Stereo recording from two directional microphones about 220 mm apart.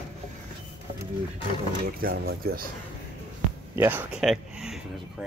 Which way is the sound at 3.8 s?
10° right (ahead or behind).